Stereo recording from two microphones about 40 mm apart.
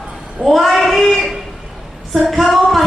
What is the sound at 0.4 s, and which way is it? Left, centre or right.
Child singing, centre.